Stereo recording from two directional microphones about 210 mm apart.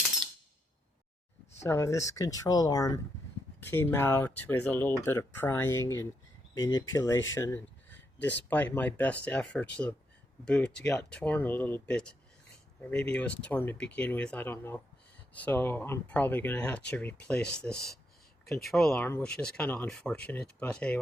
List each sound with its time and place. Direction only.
1.6 s speech: 15° left (ahead or behind)
7.3 s a sound: 15° left (ahead or behind)
8.4 s speech: 10° left (ahead or behind)